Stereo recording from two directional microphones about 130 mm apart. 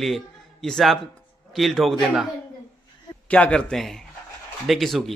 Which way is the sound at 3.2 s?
10° left (ahead or behind).